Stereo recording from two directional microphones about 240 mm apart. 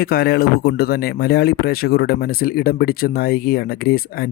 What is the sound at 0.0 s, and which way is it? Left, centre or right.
Speech, left.